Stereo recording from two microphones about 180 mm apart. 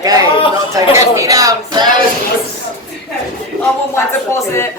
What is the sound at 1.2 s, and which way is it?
Speech, 20° right (ahead or behind).